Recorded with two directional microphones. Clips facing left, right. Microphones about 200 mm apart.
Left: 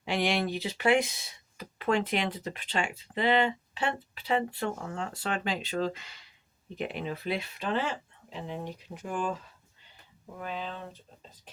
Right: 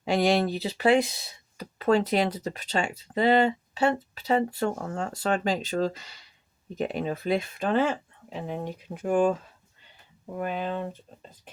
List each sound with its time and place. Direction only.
0.0 s speech: 40° right (ahead or behind)
10.3 s speech: 55° right (ahead or behind)